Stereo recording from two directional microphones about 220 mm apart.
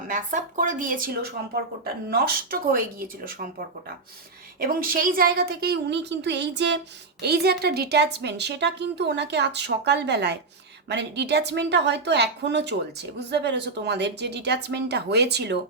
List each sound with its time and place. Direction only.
0.1 s speech: 35° right (ahead or behind)
4.6 s a woman's voice: 40° right (ahead or behind)